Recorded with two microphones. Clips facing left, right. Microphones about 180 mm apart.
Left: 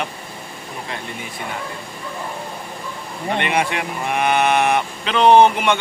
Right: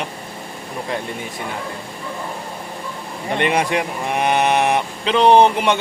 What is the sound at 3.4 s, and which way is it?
Speech, 35° right (ahead or behind).